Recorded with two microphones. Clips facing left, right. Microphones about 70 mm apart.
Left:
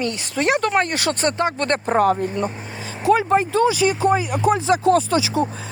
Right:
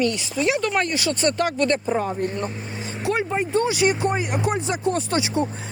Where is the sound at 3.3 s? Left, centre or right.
Left.